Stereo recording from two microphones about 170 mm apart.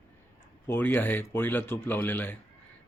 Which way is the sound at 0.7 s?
10° left (ahead or behind).